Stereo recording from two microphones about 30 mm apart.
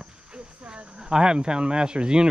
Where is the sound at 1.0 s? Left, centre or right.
Right.